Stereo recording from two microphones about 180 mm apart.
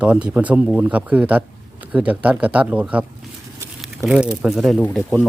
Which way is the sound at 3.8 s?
5° right (ahead or behind).